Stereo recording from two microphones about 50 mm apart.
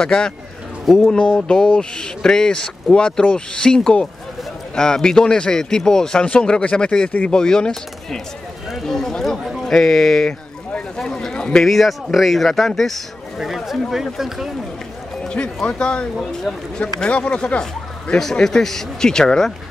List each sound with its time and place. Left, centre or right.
0.0 s speech: centre
0.9 s speech: centre
1.3 s a man's voice: centre
7.1 s a man's voice: left
7.3 s speech: centre
11.0 s a sound: centre
11.6 s speech: centre
13.7 s speech: centre
15.2 s speech: left
16.8 s a man's voice: left